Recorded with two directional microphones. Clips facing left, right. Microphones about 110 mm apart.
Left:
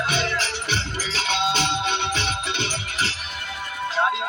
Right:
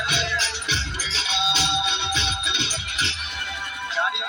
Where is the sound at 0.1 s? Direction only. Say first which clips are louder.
Left 2 dB; 45° left (ahead or behind).